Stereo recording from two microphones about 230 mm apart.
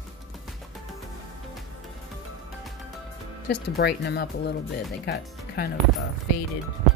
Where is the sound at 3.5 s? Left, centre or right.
Left.